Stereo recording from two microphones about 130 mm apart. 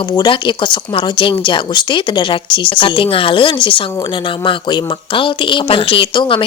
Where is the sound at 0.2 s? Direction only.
40° left (ahead or behind).